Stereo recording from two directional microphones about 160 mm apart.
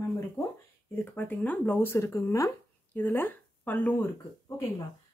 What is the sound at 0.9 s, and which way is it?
Speech, 10° left (ahead or behind).